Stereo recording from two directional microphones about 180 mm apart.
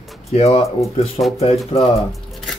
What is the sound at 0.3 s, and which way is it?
Speech, 35° left (ahead or behind).